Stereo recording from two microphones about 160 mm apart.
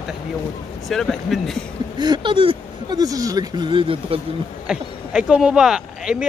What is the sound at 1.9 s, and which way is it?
Speech, 25° right (ahead or behind).